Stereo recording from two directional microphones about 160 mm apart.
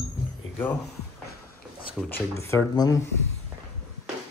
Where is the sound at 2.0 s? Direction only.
15° left (ahead or behind).